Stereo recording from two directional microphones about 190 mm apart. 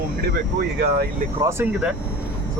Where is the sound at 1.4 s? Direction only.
10° right (ahead or behind).